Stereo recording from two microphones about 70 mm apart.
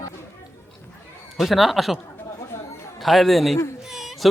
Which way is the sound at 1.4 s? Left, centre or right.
Centre.